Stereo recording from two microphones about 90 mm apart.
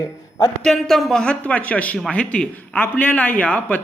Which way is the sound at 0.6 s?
Centre (ahead or behind).